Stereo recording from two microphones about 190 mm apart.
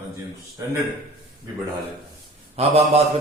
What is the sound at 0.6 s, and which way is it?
Speech, 15° right (ahead or behind).